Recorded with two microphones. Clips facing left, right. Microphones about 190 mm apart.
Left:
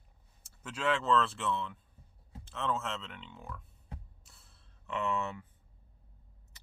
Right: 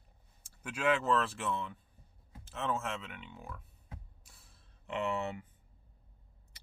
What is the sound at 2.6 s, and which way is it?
Speech, 15° right (ahead or behind).